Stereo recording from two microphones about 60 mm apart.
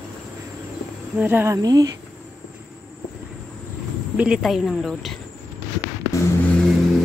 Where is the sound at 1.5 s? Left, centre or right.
Right.